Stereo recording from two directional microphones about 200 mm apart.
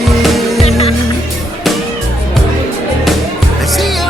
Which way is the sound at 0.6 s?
30° left (ahead or behind).